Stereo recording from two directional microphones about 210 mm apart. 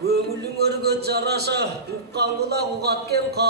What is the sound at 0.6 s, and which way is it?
Music, 50° right (ahead or behind).